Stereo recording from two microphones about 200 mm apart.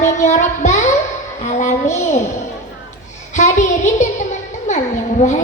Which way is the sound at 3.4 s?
35° left (ahead or behind).